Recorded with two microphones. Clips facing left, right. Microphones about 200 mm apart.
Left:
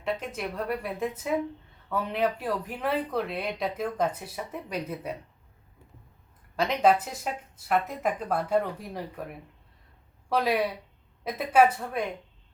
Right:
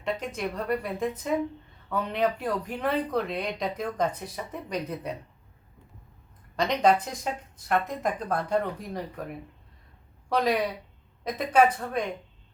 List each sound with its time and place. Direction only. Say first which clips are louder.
0.0 s speech: right 1 dB; 5° left (ahead or behind)
6.6 s speech: even; 5° left (ahead or behind)
10.2 s speech: even; 5° left (ahead or behind)